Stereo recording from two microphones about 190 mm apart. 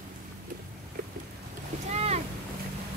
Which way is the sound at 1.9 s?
35° right (ahead or behind).